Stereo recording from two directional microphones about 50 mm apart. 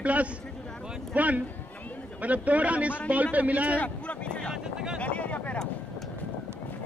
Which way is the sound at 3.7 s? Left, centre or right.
Left.